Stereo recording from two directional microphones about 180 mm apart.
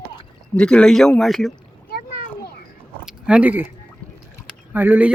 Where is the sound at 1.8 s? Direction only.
60° left (ahead or behind).